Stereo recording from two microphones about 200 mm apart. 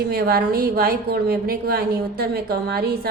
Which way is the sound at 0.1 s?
50° right (ahead or behind).